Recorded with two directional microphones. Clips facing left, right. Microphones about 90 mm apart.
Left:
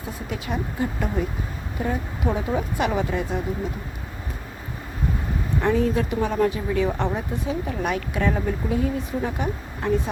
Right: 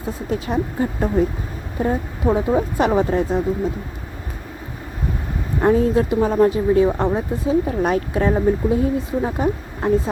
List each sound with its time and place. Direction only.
0.3 s speech: 35° right (ahead or behind)
5.5 s speech: 35° right (ahead or behind)